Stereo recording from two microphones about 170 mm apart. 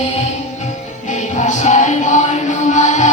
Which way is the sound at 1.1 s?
45° left (ahead or behind).